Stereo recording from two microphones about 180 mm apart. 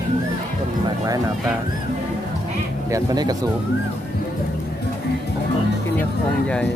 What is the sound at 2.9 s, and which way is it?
Speech, 20° right (ahead or behind).